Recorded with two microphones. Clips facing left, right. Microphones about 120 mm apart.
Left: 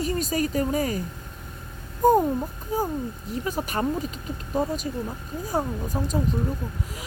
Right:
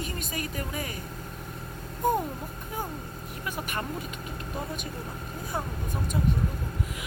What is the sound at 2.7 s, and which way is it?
Speech, 30° left (ahead or behind).